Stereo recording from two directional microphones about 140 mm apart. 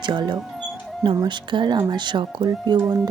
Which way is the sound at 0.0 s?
35° right (ahead or behind).